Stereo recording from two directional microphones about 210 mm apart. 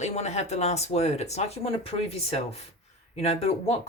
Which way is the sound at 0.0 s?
30° left (ahead or behind).